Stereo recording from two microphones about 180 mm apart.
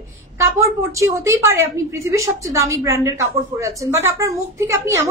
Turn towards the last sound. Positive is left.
turn(degrees=-15)  # may be behind; listen again after turning